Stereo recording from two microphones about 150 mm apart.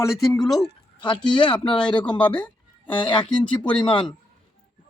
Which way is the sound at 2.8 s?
35° left (ahead or behind).